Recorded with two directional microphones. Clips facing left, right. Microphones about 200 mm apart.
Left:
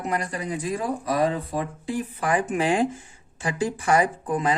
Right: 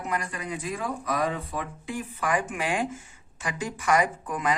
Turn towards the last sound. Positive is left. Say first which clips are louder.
# left 4 dB
turn(degrees=30)  # may be behind; listen again after turning